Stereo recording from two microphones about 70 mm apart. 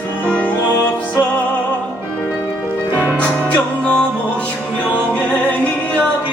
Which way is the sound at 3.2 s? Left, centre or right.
Centre.